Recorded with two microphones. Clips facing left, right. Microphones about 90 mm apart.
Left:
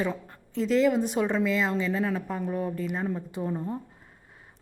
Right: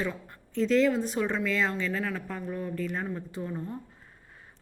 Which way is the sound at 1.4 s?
5° left (ahead or behind).